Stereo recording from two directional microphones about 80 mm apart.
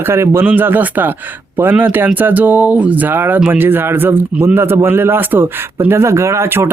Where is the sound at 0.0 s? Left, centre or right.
Right.